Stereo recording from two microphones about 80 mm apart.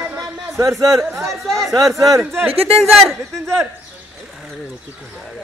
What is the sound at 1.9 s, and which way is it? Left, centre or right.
Speech, right.